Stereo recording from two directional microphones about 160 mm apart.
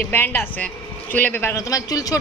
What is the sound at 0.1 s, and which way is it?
A woman's voice, 15° left (ahead or behind).